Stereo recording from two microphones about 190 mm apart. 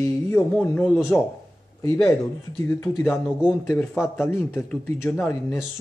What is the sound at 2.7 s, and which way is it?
Speech, 15° left (ahead or behind).